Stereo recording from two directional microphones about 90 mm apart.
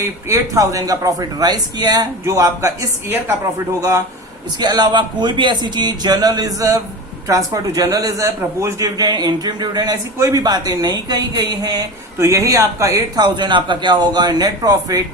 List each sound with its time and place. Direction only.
0.0 s a man's voice: 35° right (ahead or behind); by 2.0 s 50° right (ahead or behind)
2.2 s a man's voice: 35° right (ahead or behind)
4.6 s a man's voice: 50° right (ahead or behind)
12.1 s a man's voice: 35° right (ahead or behind)
13.1 s a man's voice: 50° right (ahead or behind)